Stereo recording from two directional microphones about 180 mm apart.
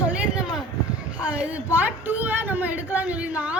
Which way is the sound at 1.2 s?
5° right (ahead or behind).